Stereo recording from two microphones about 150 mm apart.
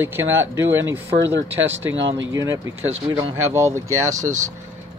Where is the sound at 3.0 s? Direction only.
20° right (ahead or behind).